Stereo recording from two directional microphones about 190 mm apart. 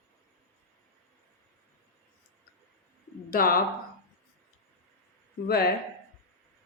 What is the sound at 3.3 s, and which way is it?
Speech, 50° left (ahead or behind).